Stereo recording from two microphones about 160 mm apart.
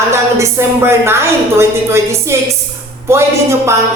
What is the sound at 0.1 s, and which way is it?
Speech, 15° right (ahead or behind).